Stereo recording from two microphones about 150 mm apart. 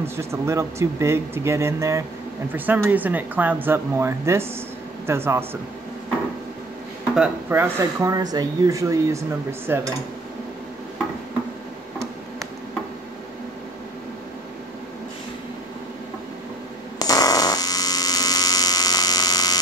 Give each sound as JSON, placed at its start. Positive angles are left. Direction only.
{"t": 0.0, "sound": "speech", "side_deg": -15}
{"t": 7.2, "sound": "speech", "side_deg": -15}
{"t": 17.0, "sound": "mains hum", "side_deg": 25}